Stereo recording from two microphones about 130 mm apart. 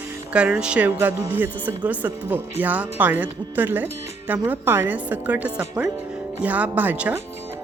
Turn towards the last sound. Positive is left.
turn(degrees=-15)  # may be behind; listen again after turning